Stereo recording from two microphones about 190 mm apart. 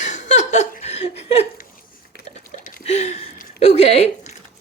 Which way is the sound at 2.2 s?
40° left (ahead or behind).